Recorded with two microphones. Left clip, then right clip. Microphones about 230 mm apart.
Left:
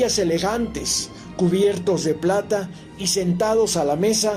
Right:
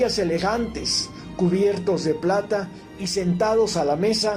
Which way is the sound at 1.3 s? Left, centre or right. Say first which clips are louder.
Left 2 dB; left.